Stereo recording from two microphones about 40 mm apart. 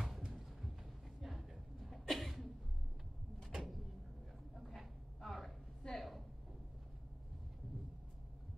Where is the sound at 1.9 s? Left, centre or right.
Centre.